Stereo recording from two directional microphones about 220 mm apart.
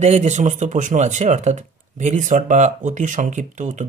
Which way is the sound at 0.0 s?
30° right (ahead or behind).